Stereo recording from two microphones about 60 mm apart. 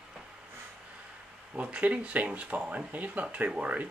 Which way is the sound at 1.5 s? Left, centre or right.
Right.